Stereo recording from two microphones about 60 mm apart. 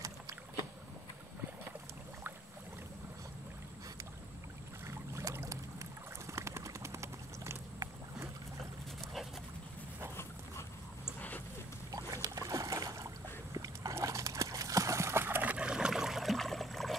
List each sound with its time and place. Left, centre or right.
4.8 s boat: right
5.5 s vehicle: right
11.1 s a sound: left
11.9 s boat: right
13.9 s horse: right
15.2 s dog: right
15.5 s a sound: centre